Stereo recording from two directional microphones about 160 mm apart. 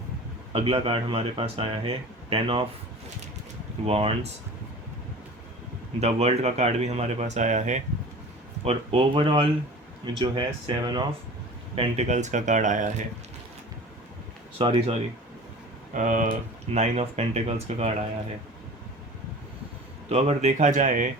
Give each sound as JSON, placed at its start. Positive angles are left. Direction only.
{"t": 0.5, "sound": "speech", "side_deg": -35}
{"t": 3.8, "sound": "speech", "side_deg": -40}
{"t": 6.0, "sound": "speech", "side_deg": -40}
{"t": 8.6, "sound": "speech", "side_deg": -35}
{"t": 11.7, "sound": "speech", "side_deg": -40}
{"t": 14.6, "sound": "speech", "side_deg": -35}
{"t": 16.0, "sound": "speech", "side_deg": -55}
{"t": 16.6, "sound": "speech", "side_deg": -40}
{"t": 20.1, "sound": "speech", "side_deg": -40}